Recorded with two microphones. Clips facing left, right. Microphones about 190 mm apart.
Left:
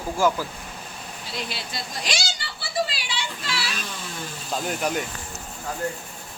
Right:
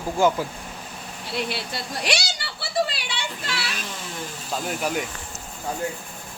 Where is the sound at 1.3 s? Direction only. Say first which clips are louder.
Right 5 dB; 60° right (ahead or behind).